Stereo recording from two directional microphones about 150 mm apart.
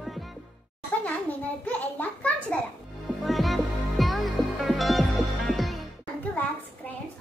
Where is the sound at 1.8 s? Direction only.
10° left (ahead or behind).